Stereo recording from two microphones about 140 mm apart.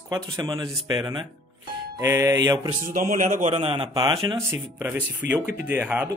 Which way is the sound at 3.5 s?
40° right (ahead or behind).